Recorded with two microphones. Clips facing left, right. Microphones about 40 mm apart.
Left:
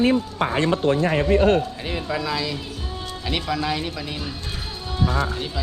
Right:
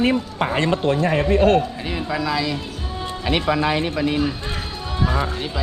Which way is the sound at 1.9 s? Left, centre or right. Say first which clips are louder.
Right 2 dB; centre.